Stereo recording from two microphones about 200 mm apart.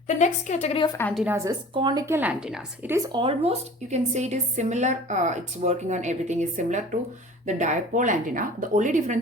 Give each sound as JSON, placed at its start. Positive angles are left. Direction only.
{"t": 0.2, "sound": "a woman's voice", "side_deg": 35}
{"t": 1.1, "sound": "a woman's voice", "side_deg": -5}
{"t": 1.5, "sound": "a woman's voice", "side_deg": -20}
{"t": 3.1, "sound": "a woman's voice", "side_deg": -25}